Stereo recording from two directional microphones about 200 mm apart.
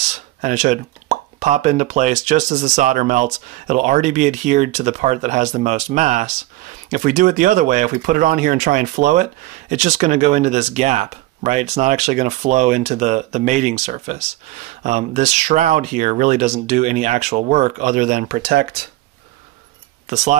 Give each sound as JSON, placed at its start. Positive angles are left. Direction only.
{"t": 0.1, "sound": "speech", "side_deg": -35}